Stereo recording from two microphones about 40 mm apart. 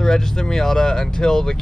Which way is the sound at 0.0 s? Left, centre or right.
Centre.